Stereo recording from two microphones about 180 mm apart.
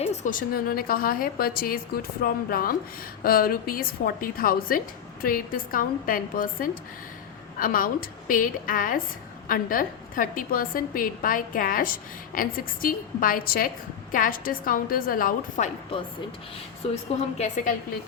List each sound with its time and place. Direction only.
0.0 s a woman's voice: 40° left (ahead or behind)
17.2 s a woman's voice: 40° left (ahead or behind)